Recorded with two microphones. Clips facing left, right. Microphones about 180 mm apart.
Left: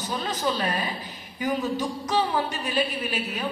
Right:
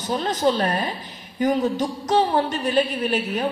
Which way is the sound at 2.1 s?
45° right (ahead or behind).